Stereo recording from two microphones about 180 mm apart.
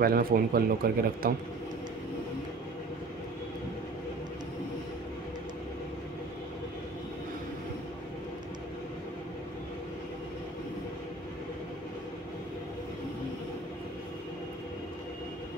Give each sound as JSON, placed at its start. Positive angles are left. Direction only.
{"t": 0.0, "sound": "speech", "side_deg": -55}